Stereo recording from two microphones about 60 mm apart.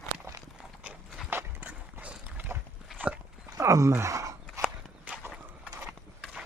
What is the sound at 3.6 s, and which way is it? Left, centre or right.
Speech, right.